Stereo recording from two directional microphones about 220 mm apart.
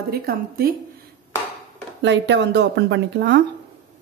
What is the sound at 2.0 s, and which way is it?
A woman's voice, 55° right (ahead or behind).